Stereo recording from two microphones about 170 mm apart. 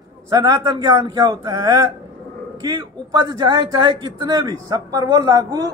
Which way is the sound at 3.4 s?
25° right (ahead or behind).